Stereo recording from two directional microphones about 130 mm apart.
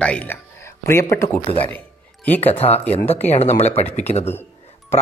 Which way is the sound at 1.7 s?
15° left (ahead or behind).